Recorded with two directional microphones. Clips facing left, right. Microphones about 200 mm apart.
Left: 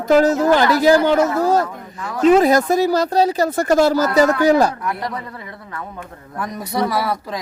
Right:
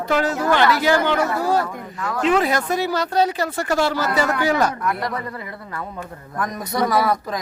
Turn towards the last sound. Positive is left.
turn(degrees=5)  # may be behind; listen again after turning